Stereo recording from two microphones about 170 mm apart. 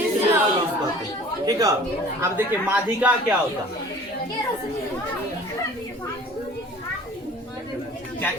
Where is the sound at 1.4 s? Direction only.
20° right (ahead or behind).